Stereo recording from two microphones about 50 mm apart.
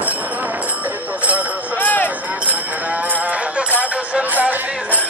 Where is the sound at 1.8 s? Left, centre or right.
Left.